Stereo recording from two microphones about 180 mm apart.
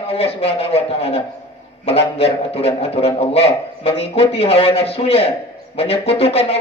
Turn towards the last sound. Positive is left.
turn(degrees=35)  # may be behind; listen again after turning